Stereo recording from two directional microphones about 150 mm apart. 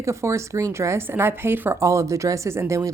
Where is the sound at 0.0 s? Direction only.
20° right (ahead or behind).